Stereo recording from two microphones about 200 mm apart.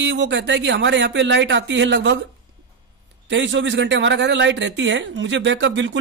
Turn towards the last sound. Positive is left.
turn(degrees=-65)  # may be behind; listen again after turning